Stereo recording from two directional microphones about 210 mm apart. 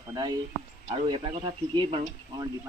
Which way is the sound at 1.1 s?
25° right (ahead or behind).